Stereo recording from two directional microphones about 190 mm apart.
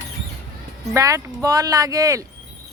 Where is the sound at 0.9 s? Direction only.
15° right (ahead or behind).